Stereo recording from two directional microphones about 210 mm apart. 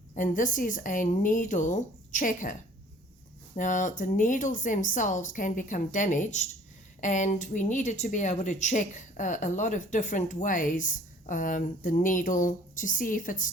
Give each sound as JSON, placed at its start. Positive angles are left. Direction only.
{"t": 0.2, "sound": "speech", "side_deg": 40}